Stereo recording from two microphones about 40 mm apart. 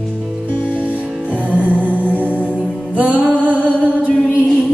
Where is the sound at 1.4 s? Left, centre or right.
Right.